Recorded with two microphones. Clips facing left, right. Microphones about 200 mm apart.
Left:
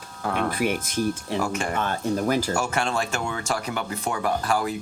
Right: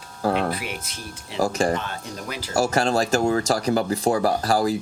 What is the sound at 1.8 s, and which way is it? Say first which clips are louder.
Speech: left 9 dB; 50° left (ahead or behind).